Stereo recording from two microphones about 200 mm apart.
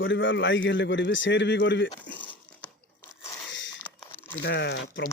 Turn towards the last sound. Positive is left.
turn(degrees=60)  # may be behind; listen again after turning